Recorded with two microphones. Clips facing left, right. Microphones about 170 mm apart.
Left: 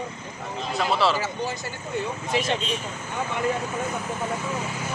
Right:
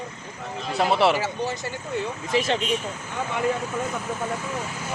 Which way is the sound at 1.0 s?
60° right (ahead or behind).